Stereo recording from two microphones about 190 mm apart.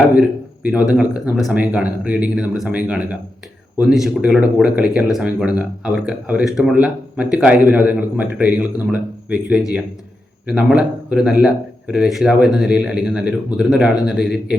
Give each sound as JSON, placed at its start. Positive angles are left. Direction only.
{"t": 0.2, "sound": "speech", "side_deg": -5}